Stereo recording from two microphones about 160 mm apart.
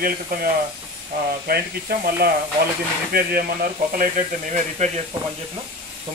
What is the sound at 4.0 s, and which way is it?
Speech, 50° right (ahead or behind).